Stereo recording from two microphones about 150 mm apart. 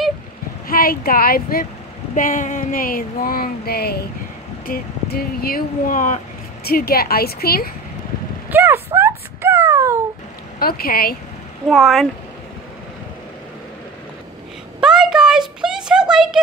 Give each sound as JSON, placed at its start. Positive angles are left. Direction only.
{"t": 0.7, "sound": "speech", "side_deg": 75}
{"t": 2.1, "sound": "speech", "side_deg": 60}
{"t": 8.5, "sound": "a sound", "side_deg": -15}
{"t": 10.6, "sound": "speech", "side_deg": 85}
{"t": 11.7, "sound": "speech", "side_deg": 0}
{"t": 14.8, "sound": "a sound", "side_deg": -5}